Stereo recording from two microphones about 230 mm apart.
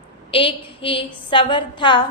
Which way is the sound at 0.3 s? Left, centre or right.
Left.